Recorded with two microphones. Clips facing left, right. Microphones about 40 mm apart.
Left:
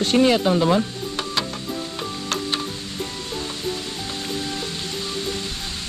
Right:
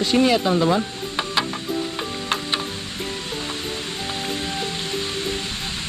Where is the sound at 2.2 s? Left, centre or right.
Right.